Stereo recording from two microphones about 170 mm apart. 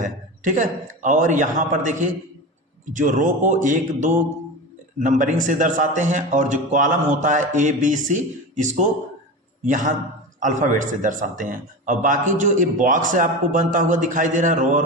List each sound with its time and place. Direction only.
0.0 s a man's voice: 50° right (ahead or behind)